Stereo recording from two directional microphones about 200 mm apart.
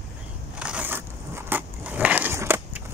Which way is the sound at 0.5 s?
5° right (ahead or behind).